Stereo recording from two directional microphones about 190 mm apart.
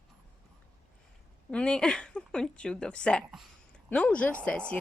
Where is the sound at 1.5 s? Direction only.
5° left (ahead or behind).